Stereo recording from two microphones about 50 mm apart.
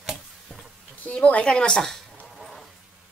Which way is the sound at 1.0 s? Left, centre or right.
Left.